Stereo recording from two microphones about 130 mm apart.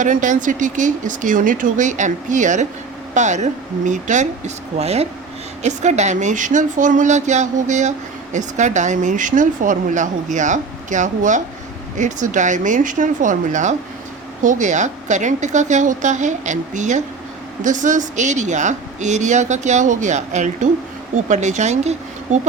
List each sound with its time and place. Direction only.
0.0 s speech: 75° right (ahead or behind); by 5.0 s 55° right (ahead or behind)
5.6 s speech: 65° right (ahead or behind)